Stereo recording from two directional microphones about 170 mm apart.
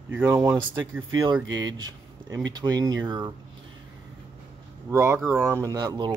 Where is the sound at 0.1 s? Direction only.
10° right (ahead or behind).